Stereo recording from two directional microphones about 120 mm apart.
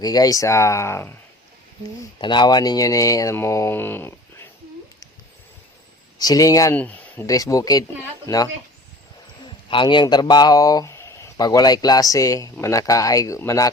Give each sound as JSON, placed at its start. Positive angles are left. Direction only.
{"t": 0.0, "sound": "speech", "side_deg": 30}
{"t": 2.2, "sound": "speech", "side_deg": 40}
{"t": 6.1, "sound": "speech", "side_deg": 30}
{"t": 6.7, "sound": "speech", "side_deg": 15}
{"t": 7.3, "sound": "speech", "side_deg": 30}
{"t": 8.3, "sound": "speech", "side_deg": 20}
{"t": 9.6, "sound": "speech", "side_deg": 40}
{"t": 11.3, "sound": "speech", "side_deg": 35}